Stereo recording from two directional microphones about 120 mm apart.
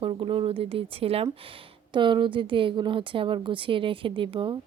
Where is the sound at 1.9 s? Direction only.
40° right (ahead or behind).